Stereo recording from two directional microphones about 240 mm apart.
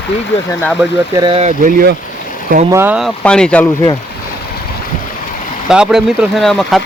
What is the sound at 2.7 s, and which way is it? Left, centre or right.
Speech, centre.